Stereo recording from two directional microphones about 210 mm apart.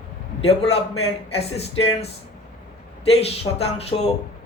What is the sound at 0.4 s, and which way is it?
A man's voice, 30° left (ahead or behind).